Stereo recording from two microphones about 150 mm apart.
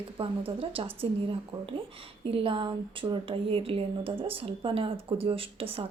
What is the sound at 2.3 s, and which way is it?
Speech, 35° right (ahead or behind).